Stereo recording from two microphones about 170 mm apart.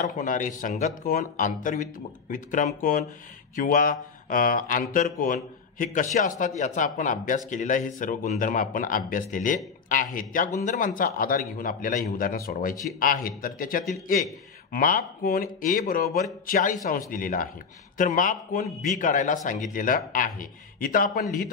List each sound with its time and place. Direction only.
0.0 s speech: 50° left (ahead or behind)